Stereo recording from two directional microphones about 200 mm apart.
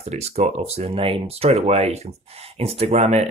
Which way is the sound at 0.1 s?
30° right (ahead or behind).